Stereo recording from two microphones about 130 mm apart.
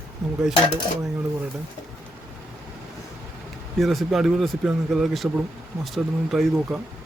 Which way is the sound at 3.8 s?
Centre (ahead or behind).